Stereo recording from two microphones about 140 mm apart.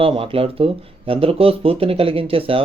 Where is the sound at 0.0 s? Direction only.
40° right (ahead or behind).